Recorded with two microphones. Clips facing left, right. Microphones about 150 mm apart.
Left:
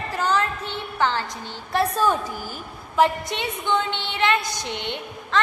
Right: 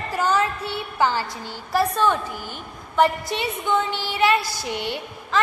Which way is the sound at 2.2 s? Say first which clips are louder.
Left 1 dB; 40° left (ahead or behind).